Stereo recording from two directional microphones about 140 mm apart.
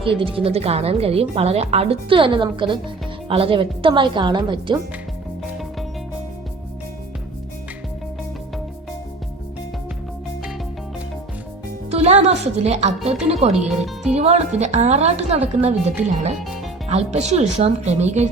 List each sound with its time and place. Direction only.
0.0 s a woman's voice: 40° right (ahead or behind)
11.9 s a woman's voice: 50° right (ahead or behind)
13.6 s speech: centre (ahead or behind)
14.1 s a woman's voice: 50° right (ahead or behind)
16.4 s music: centre (ahead or behind)
16.9 s a woman's voice: 50° right (ahead or behind)